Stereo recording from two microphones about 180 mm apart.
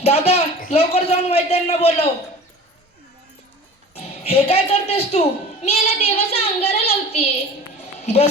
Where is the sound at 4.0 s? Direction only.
35° left (ahead or behind).